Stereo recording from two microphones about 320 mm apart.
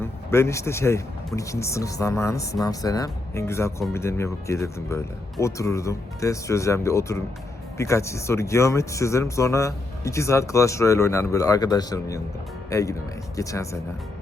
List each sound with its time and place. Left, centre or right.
0.0 s speech: centre